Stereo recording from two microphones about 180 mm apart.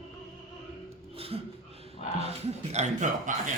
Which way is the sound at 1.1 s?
30° right (ahead or behind).